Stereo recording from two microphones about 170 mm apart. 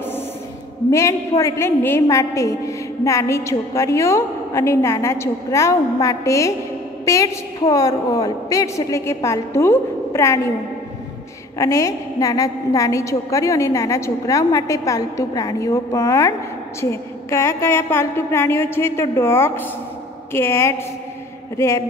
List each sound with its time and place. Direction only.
0.8 s a woman's voice: 15° left (ahead or behind)
11.5 s a woman's voice: 20° left (ahead or behind)